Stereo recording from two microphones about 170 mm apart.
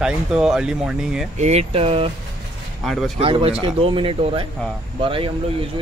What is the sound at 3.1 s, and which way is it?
Speech, 35° right (ahead or behind).